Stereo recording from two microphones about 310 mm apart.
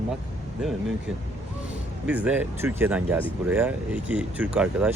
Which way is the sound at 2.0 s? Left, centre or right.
Centre.